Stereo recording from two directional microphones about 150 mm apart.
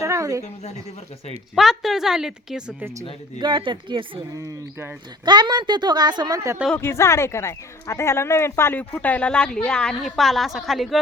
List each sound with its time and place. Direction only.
0.0 s a woman's voice: 20° right (ahead or behind)
1.5 s a woman's voice: centre (ahead or behind)
3.4 s speech: 30° right (ahead or behind)
6.7 s speech: 15° left (ahead or behind); by 11.0 s centre (ahead or behind)